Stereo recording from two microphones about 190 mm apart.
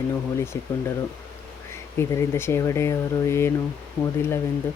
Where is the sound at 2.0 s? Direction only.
15° left (ahead or behind).